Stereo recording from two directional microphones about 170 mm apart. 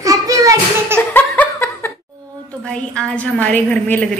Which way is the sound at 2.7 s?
5° left (ahead or behind).